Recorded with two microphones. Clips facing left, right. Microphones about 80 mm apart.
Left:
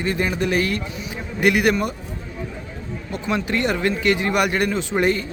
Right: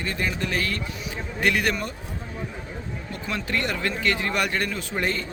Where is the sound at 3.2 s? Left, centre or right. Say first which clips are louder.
Left 6 dB; left.